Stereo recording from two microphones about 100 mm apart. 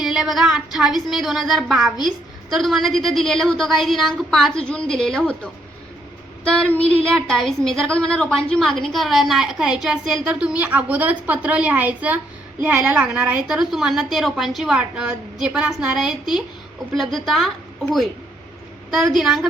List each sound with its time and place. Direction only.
0.0 s a woman's voice: 5° right (ahead or behind)
6.6 s a woman's voice: 15° left (ahead or behind)
18.9 s a woman's voice: 5° right (ahead or behind)